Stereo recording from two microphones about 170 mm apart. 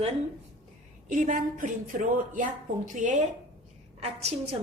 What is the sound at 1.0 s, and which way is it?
A woman's voice, 50° right (ahead or behind).